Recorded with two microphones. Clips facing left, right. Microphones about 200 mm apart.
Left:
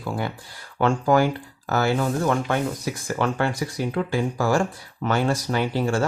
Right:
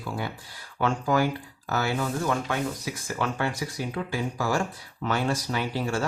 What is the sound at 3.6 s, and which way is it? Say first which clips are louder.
Speech: left 4 dB; 55° left (ahead or behind).